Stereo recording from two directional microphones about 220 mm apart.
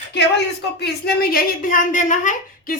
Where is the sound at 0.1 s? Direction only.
50° left (ahead or behind).